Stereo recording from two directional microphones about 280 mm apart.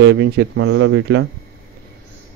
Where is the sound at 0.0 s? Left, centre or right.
Right.